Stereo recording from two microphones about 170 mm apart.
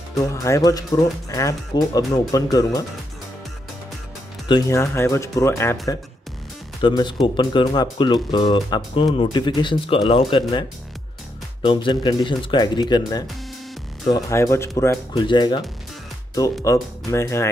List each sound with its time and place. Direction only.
0.2 s speech: 20° left (ahead or behind)
2.0 s speech: 20° left (ahead or behind)
4.5 s speech: 20° left (ahead or behind)
6.8 s speech: 25° left (ahead or behind)
11.6 s speech: 30° left (ahead or behind)
15.2 s speech: 25° left (ahead or behind)
16.6 s speech: 15° left (ahead or behind)